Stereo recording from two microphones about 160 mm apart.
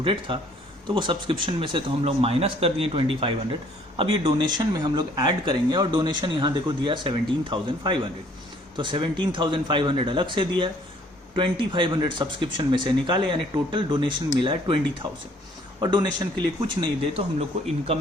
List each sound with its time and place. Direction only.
0.0 s speech: 35° right (ahead or behind)
15.8 s speech: 25° right (ahead or behind)